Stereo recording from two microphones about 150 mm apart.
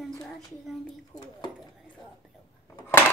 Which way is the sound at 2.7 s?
20° left (ahead or behind).